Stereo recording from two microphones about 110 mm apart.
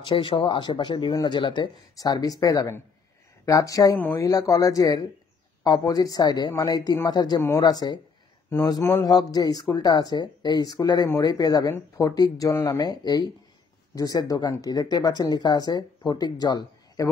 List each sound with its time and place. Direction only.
0.0 s speech: 50° left (ahead or behind); by 3.9 s 30° left (ahead or behind)
3.9 s speech: 20° left (ahead or behind)
4.2 s speech: 30° left (ahead or behind)